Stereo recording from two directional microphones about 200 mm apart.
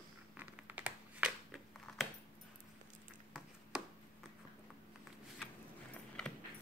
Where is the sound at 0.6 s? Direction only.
10° right (ahead or behind).